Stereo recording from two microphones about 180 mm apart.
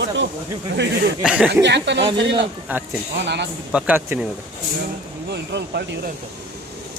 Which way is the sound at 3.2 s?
70° right (ahead or behind).